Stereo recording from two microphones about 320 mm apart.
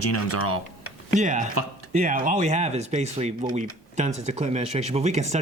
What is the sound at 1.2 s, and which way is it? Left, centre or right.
Speech, right.